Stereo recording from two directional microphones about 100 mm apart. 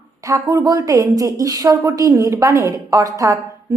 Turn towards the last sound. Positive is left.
turn(degrees=-35)  # may be behind; listen again after turning